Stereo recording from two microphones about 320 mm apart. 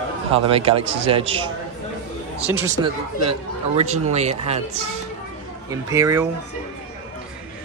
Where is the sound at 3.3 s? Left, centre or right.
Centre.